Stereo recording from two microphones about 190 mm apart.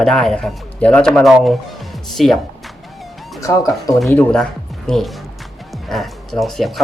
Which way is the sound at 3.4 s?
20° left (ahead or behind).